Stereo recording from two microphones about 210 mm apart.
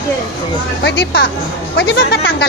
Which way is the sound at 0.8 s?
55° left (ahead or behind).